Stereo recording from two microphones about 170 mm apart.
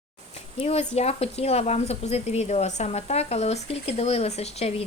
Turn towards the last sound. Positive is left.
turn(degrees=40)  # may be behind; listen again after turning